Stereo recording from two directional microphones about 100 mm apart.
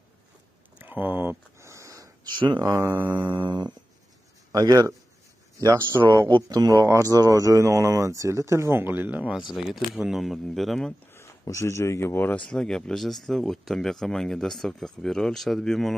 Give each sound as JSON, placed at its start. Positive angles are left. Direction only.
{"t": 0.7, "sound": "speech", "side_deg": -20}
{"t": 1.6, "sound": "sniff", "side_deg": -30}
{"t": 2.3, "sound": "a sound", "side_deg": -50}
{"t": 2.7, "sound": "speech", "side_deg": -30}
{"t": 3.0, "sound": "music", "side_deg": -15}
{"t": 3.3, "sound": "a sound", "side_deg": -50}
{"t": 4.5, "sound": "speech", "side_deg": -35}
{"t": 6.2, "sound": "speech", "side_deg": -45}
{"t": 9.3, "sound": "speech", "side_deg": 0}
{"t": 11.1, "sound": "speech", "side_deg": 25}
{"t": 12.4, "sound": "speech", "side_deg": 5}